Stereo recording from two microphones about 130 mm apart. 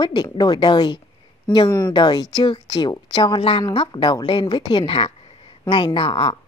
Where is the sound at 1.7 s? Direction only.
20° left (ahead or behind).